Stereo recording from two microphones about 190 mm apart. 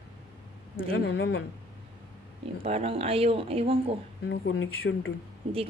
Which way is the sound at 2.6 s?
30° right (ahead or behind).